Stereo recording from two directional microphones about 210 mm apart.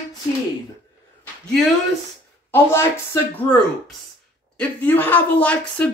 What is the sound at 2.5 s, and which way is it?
A woman's voice, 10° left (ahead or behind).